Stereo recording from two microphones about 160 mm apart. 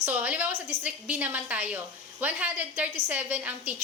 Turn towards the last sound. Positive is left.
turn(degrees=-10)  # may be behind; listen again after turning